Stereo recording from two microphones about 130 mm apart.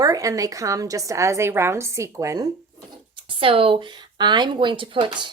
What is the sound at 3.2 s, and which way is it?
Speech, 40° right (ahead or behind).